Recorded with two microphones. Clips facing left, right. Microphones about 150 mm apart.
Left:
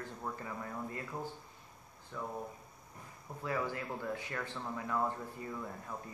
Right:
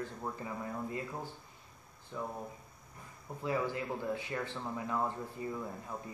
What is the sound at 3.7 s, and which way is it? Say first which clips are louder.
A man's voice: right 3 dB; 20° right (ahead or behind).